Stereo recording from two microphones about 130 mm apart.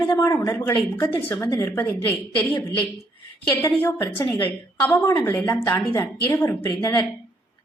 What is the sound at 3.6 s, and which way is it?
A woman's voice, 15° left (ahead or behind).